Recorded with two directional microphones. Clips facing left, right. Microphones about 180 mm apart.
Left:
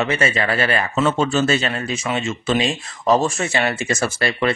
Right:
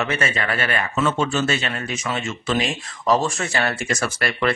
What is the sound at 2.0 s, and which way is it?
Speech, 25° left (ahead or behind).